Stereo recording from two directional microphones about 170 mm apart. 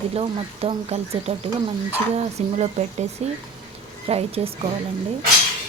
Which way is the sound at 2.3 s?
40° right (ahead or behind).